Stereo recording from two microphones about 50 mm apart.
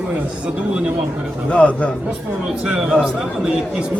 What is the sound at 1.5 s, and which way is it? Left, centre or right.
Speech, left.